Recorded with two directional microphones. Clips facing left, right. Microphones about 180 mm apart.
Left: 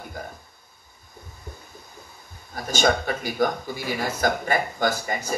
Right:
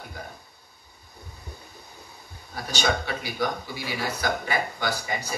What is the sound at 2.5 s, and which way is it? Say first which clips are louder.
Speech: left 4 dB; 45° left (ahead or behind).